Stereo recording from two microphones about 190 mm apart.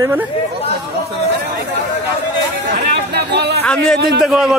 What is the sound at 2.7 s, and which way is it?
Speech, 60° right (ahead or behind).